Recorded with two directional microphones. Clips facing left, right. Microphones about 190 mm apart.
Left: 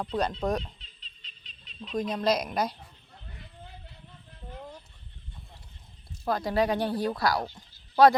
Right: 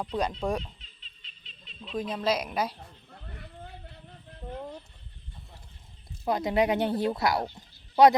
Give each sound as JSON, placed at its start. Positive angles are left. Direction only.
{"t": 0.0, "sound": "speech", "side_deg": -10}
{"t": 0.8, "sound": "laughter", "side_deg": 40}
{"t": 1.8, "sound": "a woman's voice", "side_deg": -5}
{"t": 6.2, "sound": "speech", "side_deg": -20}